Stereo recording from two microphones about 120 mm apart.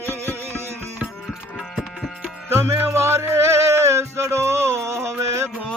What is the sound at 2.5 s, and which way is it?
Music, 20° right (ahead or behind).